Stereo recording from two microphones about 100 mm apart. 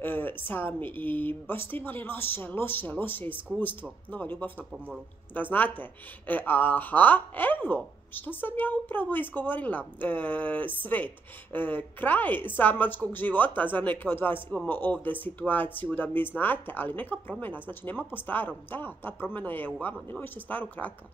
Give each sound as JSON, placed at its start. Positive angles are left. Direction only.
{"t": 0.0, "sound": "a woman's voice", "side_deg": 20}
{"t": 4.6, "sound": "a man's voice", "side_deg": -15}
{"t": 5.3, "sound": "a woman's voice", "side_deg": 20}